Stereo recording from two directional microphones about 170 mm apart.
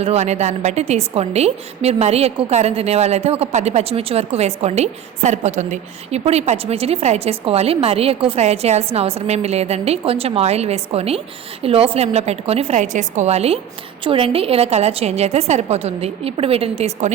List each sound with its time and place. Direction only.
0.0 s a woman's voice: 40° right (ahead or behind)